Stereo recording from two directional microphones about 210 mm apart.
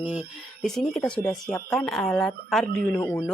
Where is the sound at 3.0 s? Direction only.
15° left (ahead or behind).